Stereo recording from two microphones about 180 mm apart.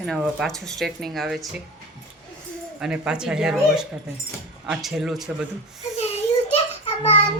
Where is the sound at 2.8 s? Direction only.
5° right (ahead or behind).